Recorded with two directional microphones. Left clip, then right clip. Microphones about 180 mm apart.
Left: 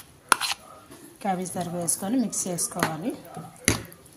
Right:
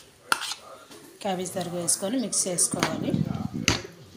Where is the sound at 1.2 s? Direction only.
40° left (ahead or behind).